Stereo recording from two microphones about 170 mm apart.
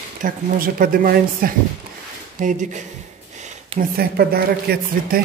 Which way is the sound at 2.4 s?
50° right (ahead or behind).